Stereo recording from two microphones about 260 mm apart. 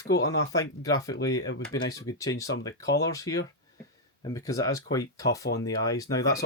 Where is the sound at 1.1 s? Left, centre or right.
Left.